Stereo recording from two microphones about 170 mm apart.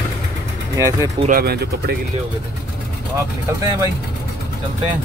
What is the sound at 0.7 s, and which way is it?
Speech, 20° right (ahead or behind).